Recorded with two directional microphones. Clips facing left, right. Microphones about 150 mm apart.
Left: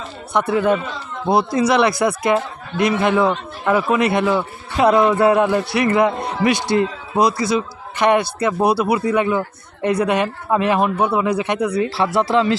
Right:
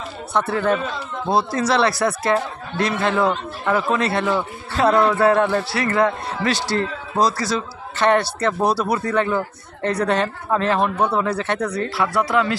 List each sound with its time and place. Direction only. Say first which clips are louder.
0.3 s speech: left 3 dB; 15° left (ahead or behind)
12.0 s speech: left 2 dB; 25° left (ahead or behind)